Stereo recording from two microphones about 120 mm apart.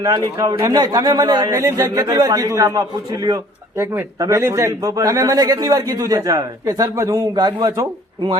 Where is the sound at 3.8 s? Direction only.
20° right (ahead or behind).